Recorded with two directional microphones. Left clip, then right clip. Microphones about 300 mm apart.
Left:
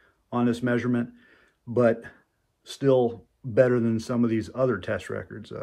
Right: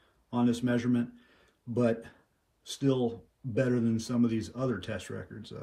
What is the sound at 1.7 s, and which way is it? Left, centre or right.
Speech, centre.